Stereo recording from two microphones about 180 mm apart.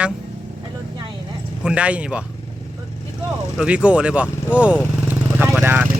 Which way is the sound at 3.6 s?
5° right (ahead or behind).